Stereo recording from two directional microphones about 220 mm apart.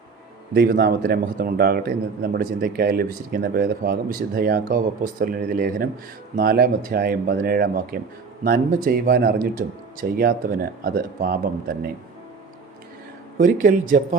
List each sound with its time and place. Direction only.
0.5 s a man's voice: 45° right (ahead or behind)
13.4 s speech: 35° right (ahead or behind)